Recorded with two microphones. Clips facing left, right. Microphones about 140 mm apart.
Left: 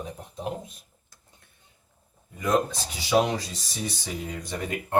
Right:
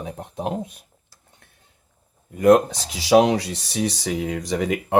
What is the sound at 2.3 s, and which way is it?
Speech, 65° right (ahead or behind).